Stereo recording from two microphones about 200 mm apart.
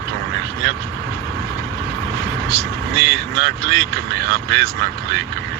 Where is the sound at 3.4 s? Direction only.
65° right (ahead or behind).